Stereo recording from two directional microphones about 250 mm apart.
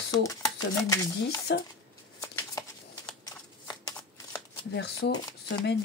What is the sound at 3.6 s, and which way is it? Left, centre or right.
Shuffling cards, centre.